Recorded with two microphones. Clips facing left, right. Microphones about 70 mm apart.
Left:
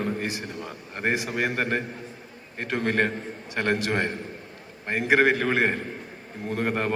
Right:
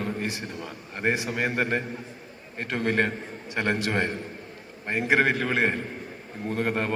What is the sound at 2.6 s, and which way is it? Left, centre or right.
Speech, left.